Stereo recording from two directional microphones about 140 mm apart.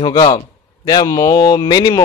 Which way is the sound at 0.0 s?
35° left (ahead or behind).